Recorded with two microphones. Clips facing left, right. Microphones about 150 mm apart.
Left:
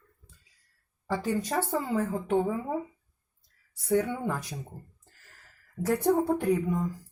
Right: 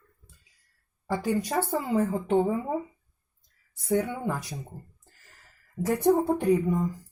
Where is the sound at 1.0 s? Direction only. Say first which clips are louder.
Right 2 dB; 15° right (ahead or behind).